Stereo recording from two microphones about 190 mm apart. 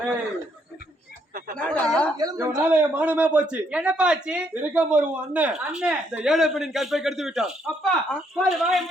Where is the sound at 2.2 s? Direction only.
20° right (ahead or behind).